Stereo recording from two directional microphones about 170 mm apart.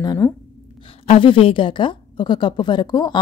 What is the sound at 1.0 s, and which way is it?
A woman's voice, 30° left (ahead or behind).